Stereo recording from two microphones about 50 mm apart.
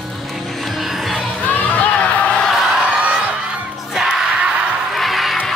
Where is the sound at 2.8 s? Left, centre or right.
Right.